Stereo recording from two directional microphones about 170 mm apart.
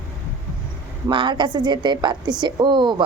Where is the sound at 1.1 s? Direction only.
30° right (ahead or behind).